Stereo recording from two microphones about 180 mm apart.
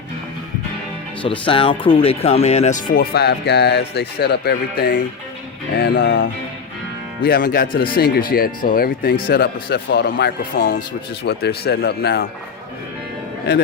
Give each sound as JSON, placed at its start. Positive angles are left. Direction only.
{"t": 1.2, "sound": "speech", "side_deg": 30}